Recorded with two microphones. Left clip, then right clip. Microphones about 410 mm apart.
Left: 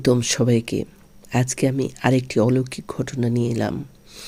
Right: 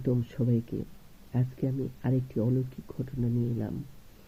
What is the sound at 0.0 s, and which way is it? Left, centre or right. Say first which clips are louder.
Speech: left 13 dB; centre.